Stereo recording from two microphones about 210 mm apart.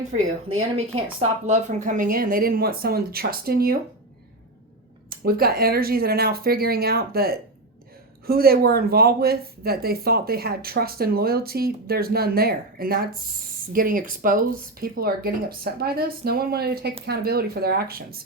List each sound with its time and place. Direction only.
1.2 s speech: 30° right (ahead or behind)
5.0 s speech: 45° right (ahead or behind)